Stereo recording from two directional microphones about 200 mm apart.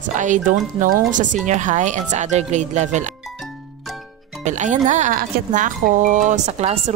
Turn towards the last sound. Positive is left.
turn(degrees=-30)  # may be behind; listen again after turning